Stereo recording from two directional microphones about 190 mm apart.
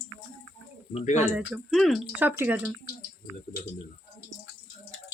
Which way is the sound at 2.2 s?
10° right (ahead or behind).